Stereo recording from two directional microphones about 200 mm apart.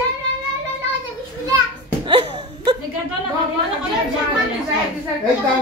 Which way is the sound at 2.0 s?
20° right (ahead or behind).